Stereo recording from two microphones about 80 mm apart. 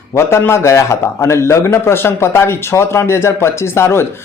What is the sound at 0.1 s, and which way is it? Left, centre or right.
A man's voice, left.